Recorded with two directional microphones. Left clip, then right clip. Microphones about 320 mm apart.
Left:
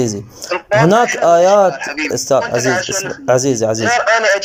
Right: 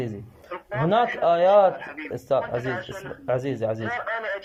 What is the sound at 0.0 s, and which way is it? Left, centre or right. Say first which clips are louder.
Speech: left 14 dB; left.